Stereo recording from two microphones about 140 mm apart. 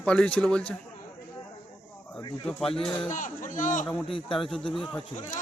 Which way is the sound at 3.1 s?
70° left (ahead or behind).